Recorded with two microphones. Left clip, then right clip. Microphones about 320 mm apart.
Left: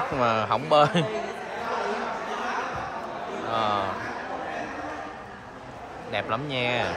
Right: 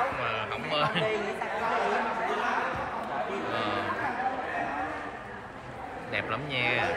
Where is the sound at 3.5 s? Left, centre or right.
Centre.